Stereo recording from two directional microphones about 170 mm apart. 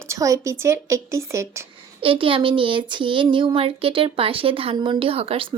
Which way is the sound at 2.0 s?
30° right (ahead or behind).